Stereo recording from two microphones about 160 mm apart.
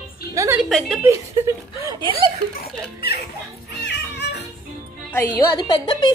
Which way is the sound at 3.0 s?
80° left.